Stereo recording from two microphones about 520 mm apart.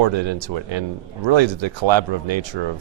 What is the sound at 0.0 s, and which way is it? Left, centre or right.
Speech, right.